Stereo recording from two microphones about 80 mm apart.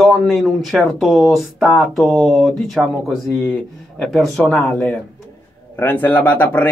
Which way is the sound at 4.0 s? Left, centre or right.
Centre.